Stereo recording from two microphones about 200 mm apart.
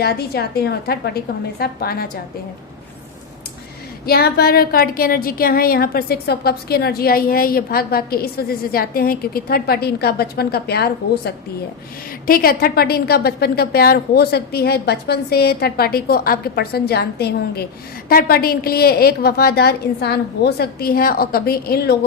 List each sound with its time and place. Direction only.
0.0 s a woman's voice: 50° left (ahead or behind)
4.0 s a woman's voice: 50° left (ahead or behind)